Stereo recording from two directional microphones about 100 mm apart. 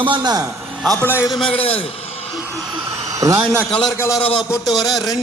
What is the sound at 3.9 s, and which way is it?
Speech, 30° left (ahead or behind).